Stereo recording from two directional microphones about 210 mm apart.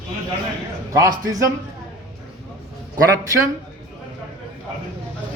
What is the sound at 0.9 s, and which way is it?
Speech, 15° right (ahead or behind).